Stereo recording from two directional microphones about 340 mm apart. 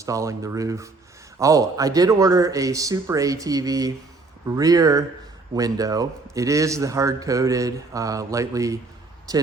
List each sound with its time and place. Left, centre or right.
0.0 s a man's voice: centre